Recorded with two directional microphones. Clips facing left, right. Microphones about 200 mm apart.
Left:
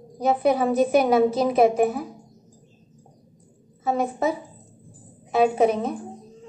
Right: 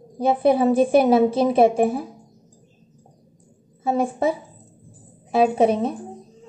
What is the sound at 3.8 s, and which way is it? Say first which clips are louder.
A woman's voice: right 2 dB; 30° right (ahead or behind).